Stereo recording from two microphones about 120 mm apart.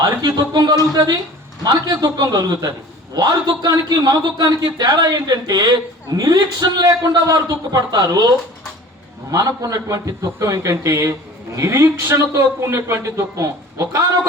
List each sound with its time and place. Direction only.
0.0 s a man's voice: 35° right (ahead or behind)
9.3 s a man's voice: 30° right (ahead or behind)